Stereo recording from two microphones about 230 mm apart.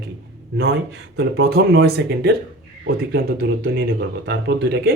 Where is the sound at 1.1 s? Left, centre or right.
Right.